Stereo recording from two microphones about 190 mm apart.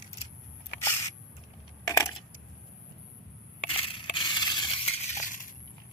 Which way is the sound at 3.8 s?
25° left (ahead or behind).